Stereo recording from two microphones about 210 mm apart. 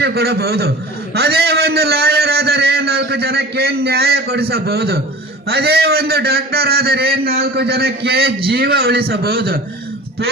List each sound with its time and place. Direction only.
0.0 s a man's voice: 50° right (ahead or behind)